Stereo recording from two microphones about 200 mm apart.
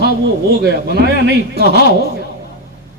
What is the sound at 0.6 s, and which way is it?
Speech, 55° right (ahead or behind).